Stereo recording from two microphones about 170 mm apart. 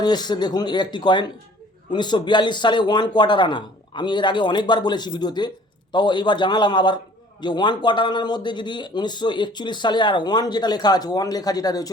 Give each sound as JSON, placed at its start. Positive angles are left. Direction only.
{"t": 0.0, "sound": "a man's voice", "side_deg": 25}